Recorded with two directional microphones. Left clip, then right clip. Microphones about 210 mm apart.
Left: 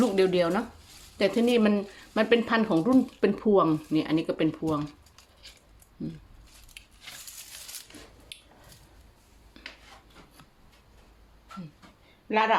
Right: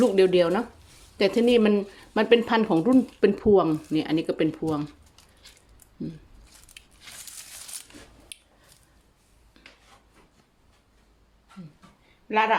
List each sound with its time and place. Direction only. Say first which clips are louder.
0.0 s speech: right 4 dB; 10° right (ahead or behind)
6.0 s speech: right 2 dB; 10° right (ahead or behind)
6.8 s a sound: left 1 dB; 5° right (ahead or behind)
8.3 s a sound: left 1 dB; 15° right (ahead or behind)
9.6 s dishes: left 7 dB; centre (ahead or behind)
12.3 s a woman's voice: right 2 dB; 5° right (ahead or behind)